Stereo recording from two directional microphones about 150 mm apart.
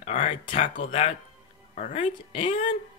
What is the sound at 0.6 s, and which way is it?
Speech, 60° left (ahead or behind).